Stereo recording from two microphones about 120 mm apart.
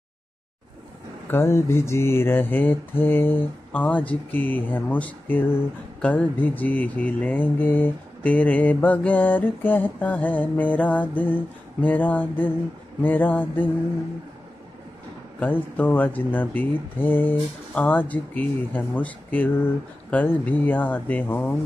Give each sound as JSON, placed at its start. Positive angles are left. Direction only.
{"t": 1.3, "sound": "mantra", "side_deg": 20}
{"t": 15.4, "sound": "mantra", "side_deg": 15}